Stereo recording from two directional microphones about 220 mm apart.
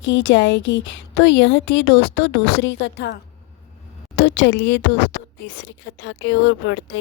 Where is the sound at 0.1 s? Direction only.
55° left (ahead or behind).